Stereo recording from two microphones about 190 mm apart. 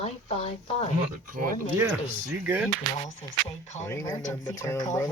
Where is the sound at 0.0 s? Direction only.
35° left (ahead or behind).